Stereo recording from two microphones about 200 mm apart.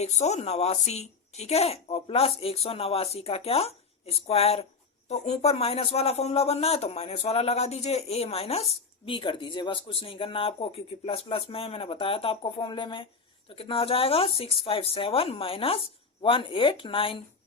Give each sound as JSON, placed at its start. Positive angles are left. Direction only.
{"t": 0.0, "sound": "a woman's voice", "side_deg": 35}